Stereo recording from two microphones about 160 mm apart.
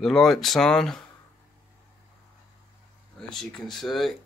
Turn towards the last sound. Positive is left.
turn(degrees=0)  # may be behind; listen again after turning